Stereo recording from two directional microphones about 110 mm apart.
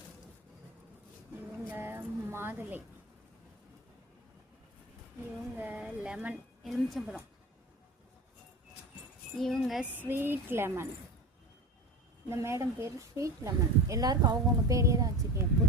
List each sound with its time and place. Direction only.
1.5 s a sound: 20° right (ahead or behind)
5.5 s speech: 15° right (ahead or behind)
6.6 s speech: centre (ahead or behind)
9.4 s speech: 5° left (ahead or behind)
10.0 s speech: 20° right (ahead or behind)
12.3 s speech: 25° right (ahead or behind)